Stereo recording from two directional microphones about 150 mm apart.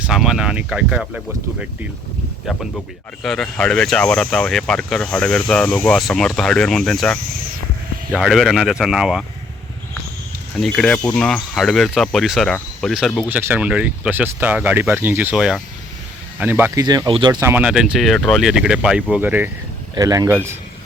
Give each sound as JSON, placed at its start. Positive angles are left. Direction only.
{"t": 0.1, "sound": "speech", "side_deg": -5}
{"t": 2.5, "sound": "speech", "side_deg": -5}
{"t": 10.6, "sound": "speech", "side_deg": 5}
{"t": 13.2, "sound": "speech", "side_deg": -10}
{"t": 16.8, "sound": "speech", "side_deg": -30}
{"t": 17.4, "sound": "speech", "side_deg": -10}
{"t": 20.0, "sound": "speech", "side_deg": -25}